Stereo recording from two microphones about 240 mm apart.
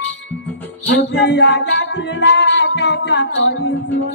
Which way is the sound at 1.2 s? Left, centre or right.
Left.